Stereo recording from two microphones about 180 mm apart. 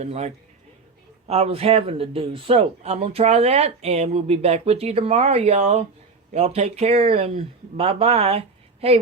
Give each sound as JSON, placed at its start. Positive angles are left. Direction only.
{"t": 0.0, "sound": "speech", "side_deg": -35}